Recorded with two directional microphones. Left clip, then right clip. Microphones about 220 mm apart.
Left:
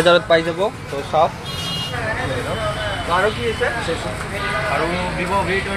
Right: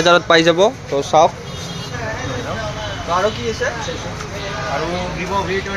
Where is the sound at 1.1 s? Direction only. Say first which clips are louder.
Right 4 dB; 45° right (ahead or behind).